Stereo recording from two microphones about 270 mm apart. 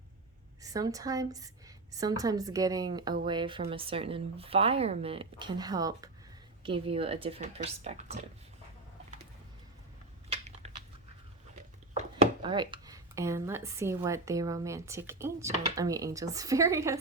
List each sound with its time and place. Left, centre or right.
0.6 s speech: centre
11.9 s speech: right